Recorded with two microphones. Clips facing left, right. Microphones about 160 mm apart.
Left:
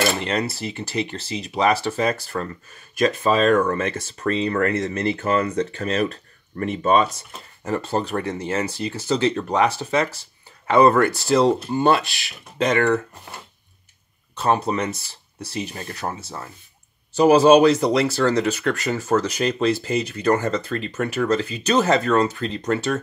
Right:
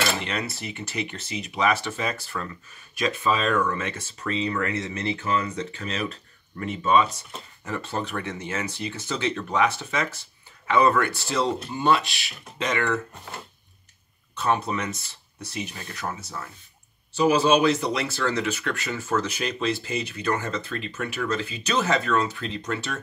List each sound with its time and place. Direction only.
0.2 s speech: 35° left (ahead or behind)
14.3 s speech: 35° left (ahead or behind)
17.1 s speech: 40° left (ahead or behind)